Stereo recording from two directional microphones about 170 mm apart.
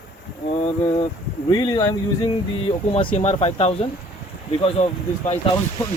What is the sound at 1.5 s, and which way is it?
Speech, 25° left (ahead or behind).